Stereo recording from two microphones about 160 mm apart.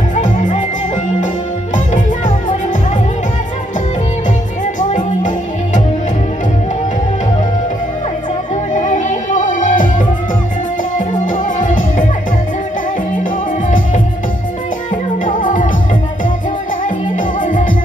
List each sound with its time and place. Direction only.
0.1 s music: 50° left (ahead or behind)
4.7 s music: 50° left (ahead or behind)
8.7 s music: 50° left (ahead or behind)
13.1 s music: 55° left (ahead or behind)
15.2 s music: 55° left (ahead or behind)
17.4 s music: 55° left (ahead or behind)